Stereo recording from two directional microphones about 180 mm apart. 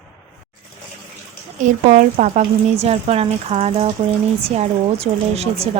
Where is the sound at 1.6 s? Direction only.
45° right (ahead or behind).